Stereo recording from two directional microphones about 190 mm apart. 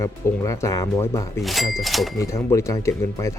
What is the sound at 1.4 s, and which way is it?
Speech, centre (ahead or behind).